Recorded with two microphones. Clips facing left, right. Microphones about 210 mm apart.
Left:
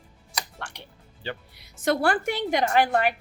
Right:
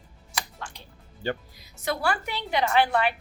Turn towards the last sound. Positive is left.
turn(degrees=45)  # may be behind; listen again after turning